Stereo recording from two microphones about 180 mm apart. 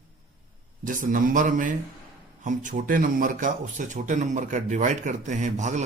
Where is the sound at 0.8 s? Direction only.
45° right (ahead or behind).